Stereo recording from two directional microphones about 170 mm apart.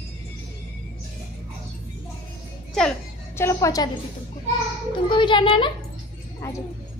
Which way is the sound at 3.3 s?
15° left (ahead or behind).